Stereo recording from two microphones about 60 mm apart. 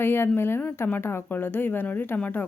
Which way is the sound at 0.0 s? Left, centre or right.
Left.